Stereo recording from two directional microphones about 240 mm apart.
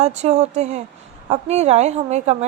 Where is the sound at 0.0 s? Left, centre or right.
Right.